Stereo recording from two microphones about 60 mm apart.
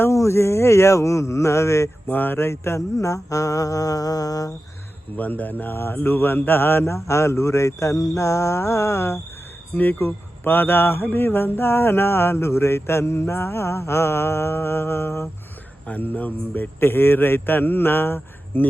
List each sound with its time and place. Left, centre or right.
0.1 s speech: left
2.0 s music: left
5.1 s a man's voice: left
6.9 s music: left
9.7 s speech: left
15.9 s a man's voice: left